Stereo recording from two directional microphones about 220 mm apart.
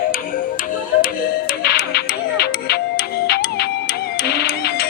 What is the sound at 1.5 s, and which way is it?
Music, 45° left (ahead or behind).